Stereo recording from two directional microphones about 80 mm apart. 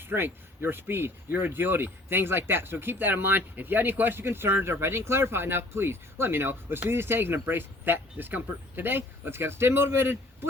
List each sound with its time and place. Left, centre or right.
0.0 s speech: right